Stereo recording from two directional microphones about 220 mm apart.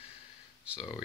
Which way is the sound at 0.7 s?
20° left (ahead or behind).